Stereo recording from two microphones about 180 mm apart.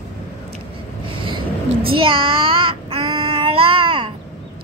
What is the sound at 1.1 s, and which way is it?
Vehicle, 25° right (ahead or behind).